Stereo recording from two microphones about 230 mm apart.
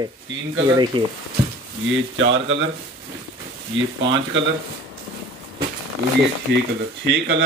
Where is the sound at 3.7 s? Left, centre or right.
Right.